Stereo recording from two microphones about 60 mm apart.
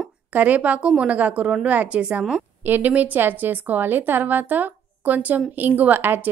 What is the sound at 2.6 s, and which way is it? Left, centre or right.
A woman's voice, right.